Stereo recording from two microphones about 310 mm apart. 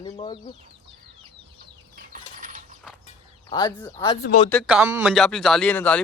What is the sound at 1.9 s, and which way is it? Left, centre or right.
Mechanisms, right.